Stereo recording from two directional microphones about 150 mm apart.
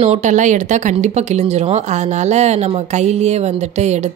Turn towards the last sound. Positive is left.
turn(degrees=-50)  # may be behind; listen again after turning